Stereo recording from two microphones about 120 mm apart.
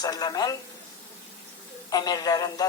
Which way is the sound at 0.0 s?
35° left (ahead or behind).